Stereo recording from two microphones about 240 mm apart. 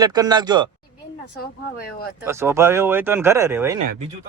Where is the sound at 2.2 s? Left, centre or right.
Centre.